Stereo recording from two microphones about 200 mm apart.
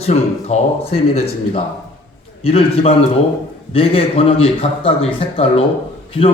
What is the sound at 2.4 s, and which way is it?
A man's voice, 30° left (ahead or behind).